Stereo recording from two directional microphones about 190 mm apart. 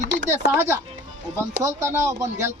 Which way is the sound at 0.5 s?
15° right (ahead or behind).